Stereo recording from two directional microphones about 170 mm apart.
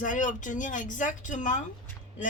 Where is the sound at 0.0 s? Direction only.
50° left (ahead or behind).